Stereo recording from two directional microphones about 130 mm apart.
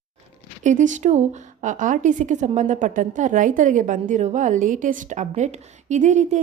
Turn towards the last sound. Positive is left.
turn(degrees=-70)  # may be behind; listen again after turning